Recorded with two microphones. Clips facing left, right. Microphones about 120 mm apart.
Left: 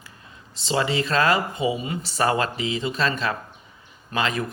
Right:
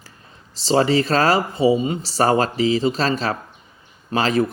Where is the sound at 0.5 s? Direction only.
35° right (ahead or behind).